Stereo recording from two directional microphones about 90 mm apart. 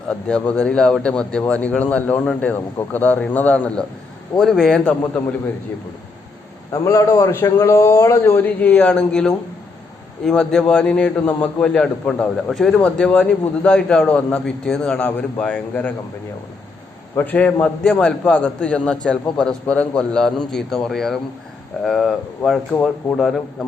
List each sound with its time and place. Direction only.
0.1 s a man's voice: 10° left (ahead or behind)
6.7 s a man's voice: 40° left (ahead or behind); by 16.0 s 20° left (ahead or behind)
17.2 s a man's voice: 15° left (ahead or behind)